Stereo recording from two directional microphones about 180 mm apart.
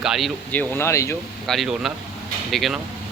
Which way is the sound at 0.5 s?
10° left (ahead or behind).